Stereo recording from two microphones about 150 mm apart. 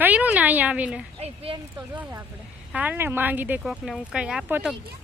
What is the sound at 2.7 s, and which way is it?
Speech, 10° right (ahead or behind).